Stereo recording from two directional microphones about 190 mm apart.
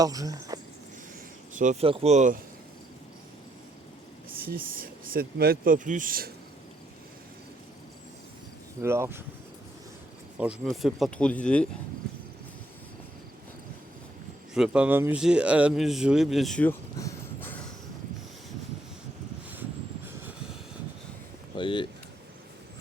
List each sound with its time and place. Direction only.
0.0 s speech: 20° right (ahead or behind)
1.5 s speech: 40° right (ahead or behind)
4.4 s speech: 50° right (ahead or behind)
8.8 s speech: 15° right (ahead or behind)
10.3 s speech: 5° right (ahead or behind)
14.5 s speech: 5° right (ahead or behind)
17.0 s a sound: 15° left (ahead or behind)
21.5 s a sound: 25° left (ahead or behind)